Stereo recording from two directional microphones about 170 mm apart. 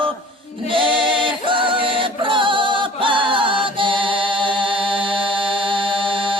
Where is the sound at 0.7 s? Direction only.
30° right (ahead or behind).